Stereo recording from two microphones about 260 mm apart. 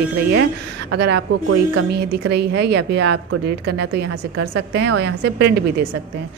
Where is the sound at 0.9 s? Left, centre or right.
Right.